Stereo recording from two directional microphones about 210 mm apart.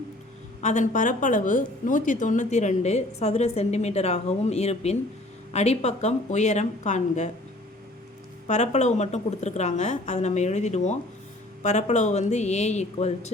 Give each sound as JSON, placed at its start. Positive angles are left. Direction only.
{"t": 0.6, "sound": "a woman's voice", "side_deg": 35}
{"t": 8.4, "sound": "a woman's voice", "side_deg": 35}